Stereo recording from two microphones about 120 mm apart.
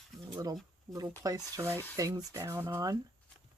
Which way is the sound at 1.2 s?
30° right (ahead or behind).